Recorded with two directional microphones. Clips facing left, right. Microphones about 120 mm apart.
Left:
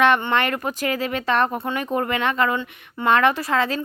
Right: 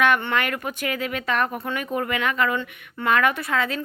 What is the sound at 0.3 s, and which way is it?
Speech, 35° left (ahead or behind).